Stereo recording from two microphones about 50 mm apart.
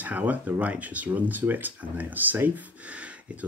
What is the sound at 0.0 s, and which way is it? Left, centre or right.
Speech, right.